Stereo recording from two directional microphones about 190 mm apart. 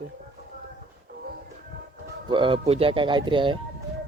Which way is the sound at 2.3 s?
25° right (ahead or behind).